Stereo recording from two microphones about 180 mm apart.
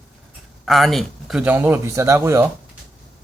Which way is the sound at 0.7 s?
Centre (ahead or behind).